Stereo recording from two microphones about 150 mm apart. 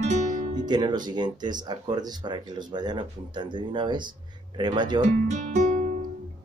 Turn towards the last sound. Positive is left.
turn(degrees=-50)  # may be behind; listen again after turning